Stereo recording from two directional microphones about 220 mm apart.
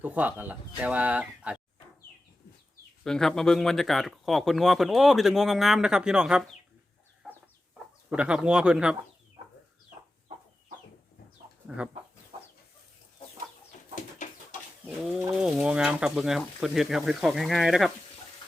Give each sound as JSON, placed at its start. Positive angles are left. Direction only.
{"t": 0.0, "sound": "speech", "side_deg": -5}
{"t": 3.0, "sound": "speech", "side_deg": 0}
{"t": 7.2, "sound": "chicken", "side_deg": 0}
{"t": 8.1, "sound": "speech", "side_deg": -5}
{"t": 14.2, "sound": "bird", "side_deg": 35}
{"t": 14.8, "sound": "speech", "side_deg": -5}